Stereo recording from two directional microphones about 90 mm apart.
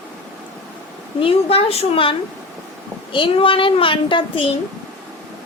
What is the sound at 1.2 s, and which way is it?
A woman's voice, 85° left.